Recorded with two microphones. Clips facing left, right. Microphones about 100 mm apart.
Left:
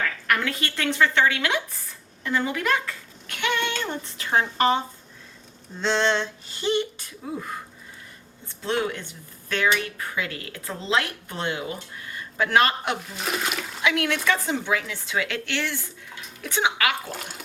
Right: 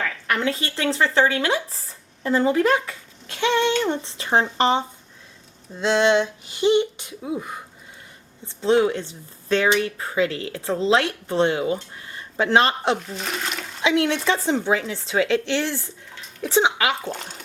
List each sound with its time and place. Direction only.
0.3 s a child's voice: 25° right (ahead or behind)
5.8 s a sound: 10° right (ahead or behind)
8.4 s speech: 25° right (ahead or behind)
13.2 s water: 5° left (ahead or behind)
13.8 s speech: 25° right (ahead or behind)
17.1 s speech: 5° left (ahead or behind)